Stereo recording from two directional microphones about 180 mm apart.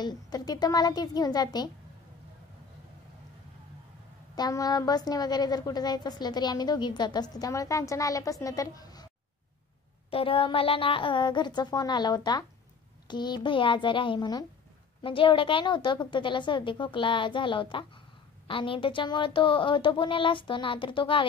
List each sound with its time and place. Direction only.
0.0 s a woman's voice: 20° left (ahead or behind)
4.4 s a woman's voice: 20° left (ahead or behind)
10.1 s a woman's voice: 30° left (ahead or behind)